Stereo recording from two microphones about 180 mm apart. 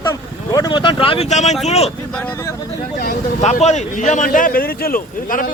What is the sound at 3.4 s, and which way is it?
Speech, 40° left (ahead or behind).